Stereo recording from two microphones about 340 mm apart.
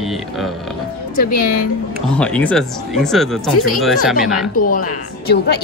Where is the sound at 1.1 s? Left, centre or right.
Left.